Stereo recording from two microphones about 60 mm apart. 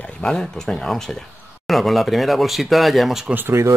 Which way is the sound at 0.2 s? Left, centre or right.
Centre.